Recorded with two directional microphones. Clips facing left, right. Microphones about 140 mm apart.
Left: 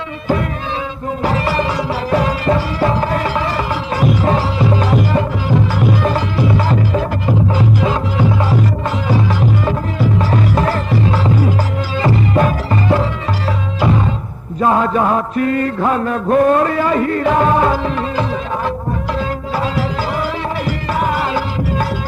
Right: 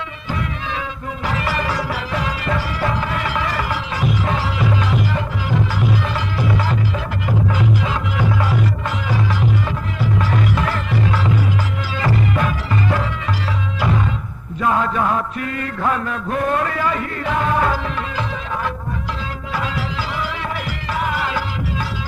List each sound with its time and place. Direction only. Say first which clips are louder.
1.2 s music: left 5 dB; 30° left (ahead or behind)
2.0 s music: left 8 dB; 40° left (ahead or behind)
6.4 s music: left 4 dB; 30° left (ahead or behind)
10.2 s music: left 3 dB; 35° left (ahead or behind)
14.6 s mantra: left 5 dB; 30° left (ahead or behind)
15.8 s music: left 5 dB; 30° left (ahead or behind)